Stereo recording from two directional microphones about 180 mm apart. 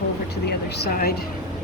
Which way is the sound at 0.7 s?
65° left (ahead or behind).